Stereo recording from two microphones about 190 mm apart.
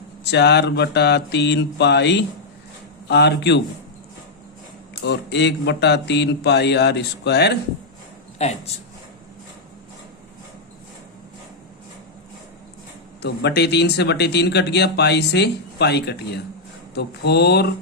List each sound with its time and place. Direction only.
0.3 s speech: 65° left (ahead or behind)
5.0 s speech: 65° left (ahead or behind)
8.4 s speech: 35° left (ahead or behind)
13.2 s speech: 60° left (ahead or behind)